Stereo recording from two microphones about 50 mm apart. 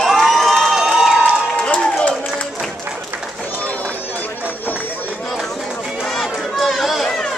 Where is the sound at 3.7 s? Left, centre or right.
Left.